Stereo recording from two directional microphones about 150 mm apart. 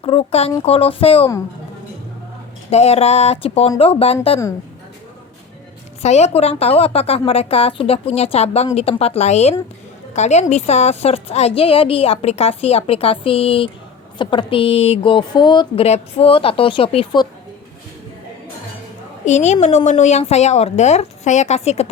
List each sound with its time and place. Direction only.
0.0 s a woman's voice: 40° left (ahead or behind)
2.6 s a woman's voice: 45° left (ahead or behind)
6.0 s a woman's voice: 45° left (ahead or behind)
19.2 s a woman's voice: 50° left (ahead or behind)